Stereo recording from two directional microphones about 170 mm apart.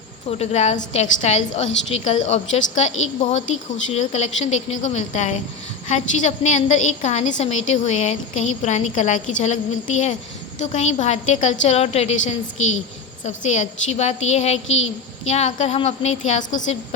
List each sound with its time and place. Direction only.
0.3 s a woman's voice: 40° left (ahead or behind)
10.6 s a woman's voice: 45° left (ahead or behind)